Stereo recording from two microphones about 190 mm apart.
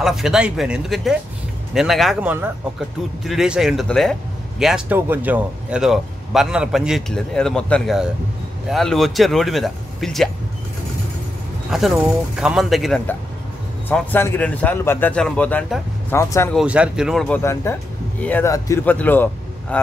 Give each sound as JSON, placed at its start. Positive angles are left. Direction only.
{"t": 0.0, "sound": "speech", "side_deg": 0}
{"t": 11.7, "sound": "speech", "side_deg": 0}
{"t": 13.8, "sound": "speech", "side_deg": 10}
{"t": 16.5, "sound": "speech", "side_deg": -5}
{"t": 17.4, "sound": "speech", "side_deg": 15}